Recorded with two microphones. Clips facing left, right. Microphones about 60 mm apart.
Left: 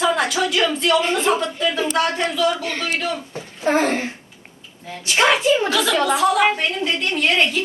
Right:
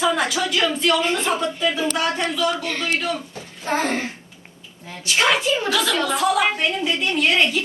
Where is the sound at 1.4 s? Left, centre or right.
Centre.